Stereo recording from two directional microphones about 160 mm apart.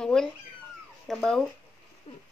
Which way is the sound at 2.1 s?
35° left (ahead or behind).